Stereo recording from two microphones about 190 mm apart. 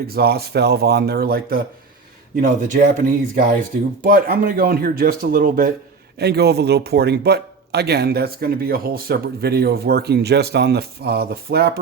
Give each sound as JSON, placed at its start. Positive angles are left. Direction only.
{"t": 0.1, "sound": "speech", "side_deg": -55}